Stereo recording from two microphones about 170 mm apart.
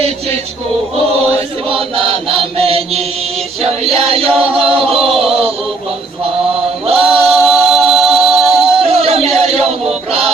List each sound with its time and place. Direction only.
1.6 s chant: 30° right (ahead or behind)
5.3 s a sound: 35° right (ahead or behind)
6.9 s singing: 5° right (ahead or behind)
7.3 s music: centre (ahead or behind)
8.9 s a sound: 35° right (ahead or behind)
9.5 s music: 35° right (ahead or behind)